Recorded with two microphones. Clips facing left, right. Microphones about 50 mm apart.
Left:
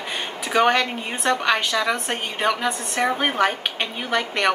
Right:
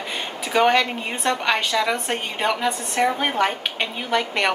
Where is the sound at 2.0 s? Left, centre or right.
Centre.